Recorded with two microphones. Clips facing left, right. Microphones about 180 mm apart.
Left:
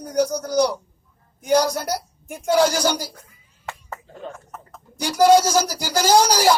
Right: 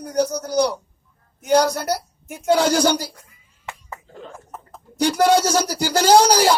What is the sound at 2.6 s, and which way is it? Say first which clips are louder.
Speech: right 4 dB; 65° right (ahead or behind).